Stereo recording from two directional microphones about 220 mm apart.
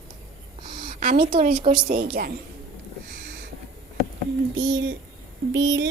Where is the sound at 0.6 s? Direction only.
20° right (ahead or behind).